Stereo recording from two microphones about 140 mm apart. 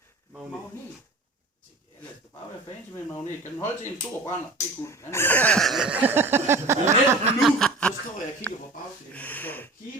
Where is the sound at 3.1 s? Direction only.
15° left (ahead or behind).